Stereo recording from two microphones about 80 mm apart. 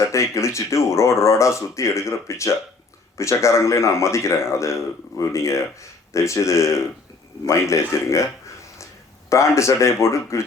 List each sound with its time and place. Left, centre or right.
0.1 s speech: left
9.3 s speech: left